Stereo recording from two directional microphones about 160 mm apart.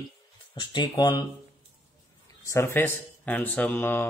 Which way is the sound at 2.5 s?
15° left (ahead or behind).